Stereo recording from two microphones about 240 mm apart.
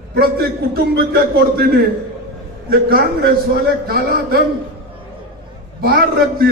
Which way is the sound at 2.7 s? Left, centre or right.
Right.